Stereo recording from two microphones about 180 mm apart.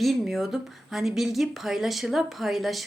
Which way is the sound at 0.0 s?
Centre (ahead or behind).